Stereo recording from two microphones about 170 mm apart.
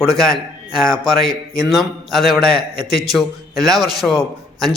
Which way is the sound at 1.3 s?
20° right (ahead or behind).